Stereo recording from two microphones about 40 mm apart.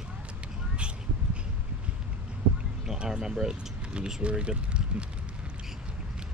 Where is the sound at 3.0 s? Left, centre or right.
Centre.